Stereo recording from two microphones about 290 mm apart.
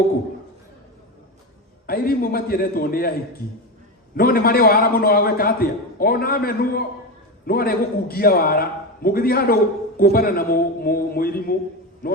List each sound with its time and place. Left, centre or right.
1.9 s a man's voice: left
4.2 s a man's voice: left